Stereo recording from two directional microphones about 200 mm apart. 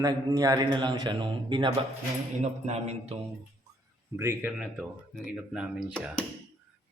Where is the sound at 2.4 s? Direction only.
35° right (ahead or behind).